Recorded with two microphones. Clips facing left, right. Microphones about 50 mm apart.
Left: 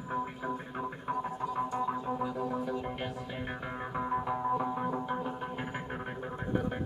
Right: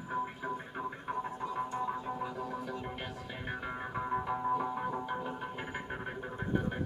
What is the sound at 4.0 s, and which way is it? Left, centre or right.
Music, centre.